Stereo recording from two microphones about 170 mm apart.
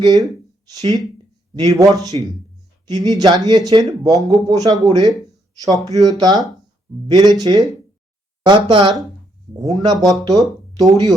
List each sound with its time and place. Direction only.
0.0 s speech: 20° right (ahead or behind)
1.5 s speech: 20° right (ahead or behind)
10.0 s speech: centre (ahead or behind)
10.8 s speech: 20° right (ahead or behind)